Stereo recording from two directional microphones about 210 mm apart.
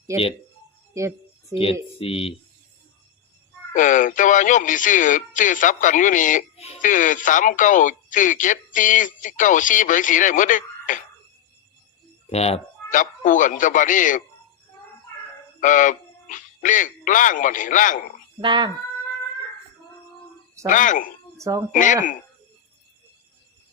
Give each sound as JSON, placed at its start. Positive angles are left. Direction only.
{"t": 0.9, "sound": "speech", "side_deg": -15}
{"t": 2.0, "sound": "speech", "side_deg": 25}
{"t": 3.8, "sound": "speech", "side_deg": 40}
{"t": 12.3, "sound": "speech", "side_deg": 30}
{"t": 15.6, "sound": "speech", "side_deg": 40}
{"t": 18.4, "sound": "speech", "side_deg": -25}
{"t": 20.7, "sound": "speech", "side_deg": 40}
{"t": 21.3, "sound": "speech", "side_deg": -15}
{"t": 21.7, "sound": "speech", "side_deg": 35}